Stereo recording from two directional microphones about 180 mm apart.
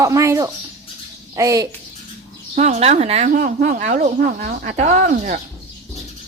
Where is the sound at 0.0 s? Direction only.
15° right (ahead or behind).